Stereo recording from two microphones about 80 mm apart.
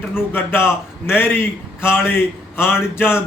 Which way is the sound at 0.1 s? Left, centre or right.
Left.